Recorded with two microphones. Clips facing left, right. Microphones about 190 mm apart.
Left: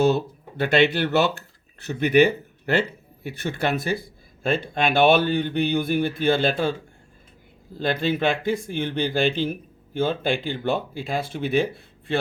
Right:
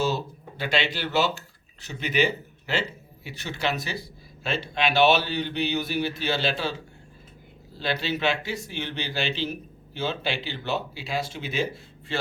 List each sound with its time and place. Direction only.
0.0 s speech: 60° left (ahead or behind)